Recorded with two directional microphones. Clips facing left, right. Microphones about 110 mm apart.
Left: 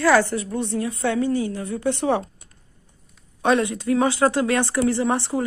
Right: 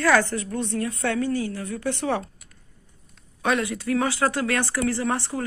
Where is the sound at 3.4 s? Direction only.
25° left (ahead or behind).